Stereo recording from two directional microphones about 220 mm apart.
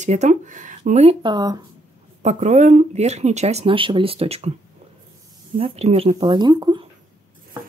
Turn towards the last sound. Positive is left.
turn(degrees=-20)  # may be behind; listen again after turning